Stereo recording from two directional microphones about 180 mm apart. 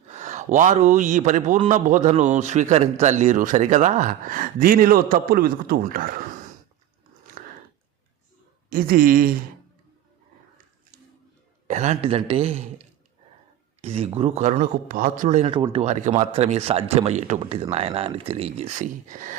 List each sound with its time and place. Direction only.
0.1 s a man's voice: 40° right (ahead or behind)
8.7 s a man's voice: 50° right (ahead or behind)
11.7 s a man's voice: 40° right (ahead or behind)